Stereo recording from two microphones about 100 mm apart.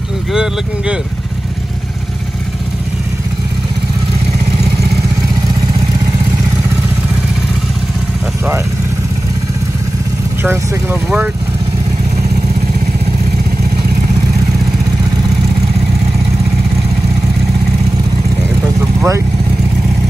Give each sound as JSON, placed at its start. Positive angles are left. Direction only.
{"t": 0.3, "sound": "speech", "side_deg": -10}
{"t": 10.4, "sound": "speech", "side_deg": -25}
{"t": 18.9, "sound": "speech", "side_deg": -30}